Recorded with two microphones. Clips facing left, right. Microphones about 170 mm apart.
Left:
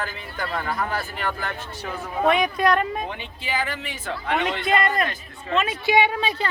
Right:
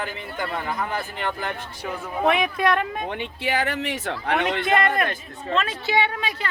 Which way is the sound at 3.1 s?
65° right (ahead or behind).